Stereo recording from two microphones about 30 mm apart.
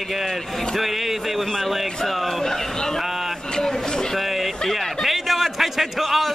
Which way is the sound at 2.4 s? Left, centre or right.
Centre.